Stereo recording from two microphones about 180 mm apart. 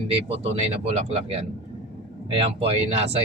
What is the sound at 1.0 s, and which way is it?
Speech, 35° right (ahead or behind).